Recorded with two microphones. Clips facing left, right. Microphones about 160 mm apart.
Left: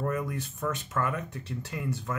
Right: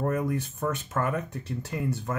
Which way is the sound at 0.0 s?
45° right (ahead or behind).